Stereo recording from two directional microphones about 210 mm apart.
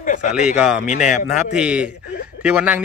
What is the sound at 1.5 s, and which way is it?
Speech, 5° right (ahead or behind).